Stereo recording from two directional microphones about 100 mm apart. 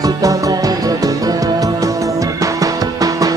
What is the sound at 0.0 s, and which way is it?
Music, 35° right (ahead or behind).